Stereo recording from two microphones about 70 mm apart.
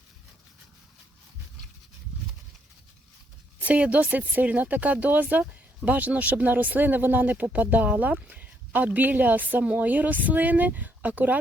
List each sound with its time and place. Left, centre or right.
3.6 s speech: centre